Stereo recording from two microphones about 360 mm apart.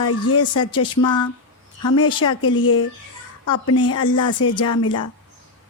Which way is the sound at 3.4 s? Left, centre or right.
Left.